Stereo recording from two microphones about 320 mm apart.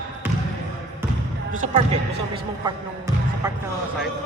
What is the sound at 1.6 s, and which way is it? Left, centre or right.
Speech, centre.